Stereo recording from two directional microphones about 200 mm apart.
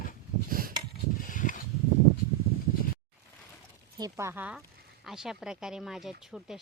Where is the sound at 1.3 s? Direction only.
40° left (ahead or behind).